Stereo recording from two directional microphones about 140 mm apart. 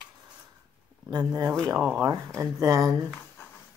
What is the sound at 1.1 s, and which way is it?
Speech, 25° right (ahead or behind).